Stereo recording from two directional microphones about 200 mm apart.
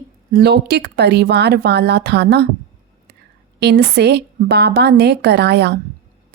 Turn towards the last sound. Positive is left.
turn(degrees=-55)  # may be behind; listen again after turning